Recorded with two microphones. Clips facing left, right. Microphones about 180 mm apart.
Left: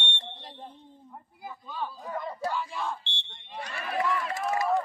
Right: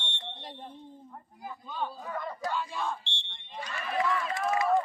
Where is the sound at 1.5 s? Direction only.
5° left (ahead or behind).